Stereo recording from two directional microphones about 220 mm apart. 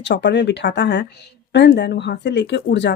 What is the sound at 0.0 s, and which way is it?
Speech, 50° left (ahead or behind).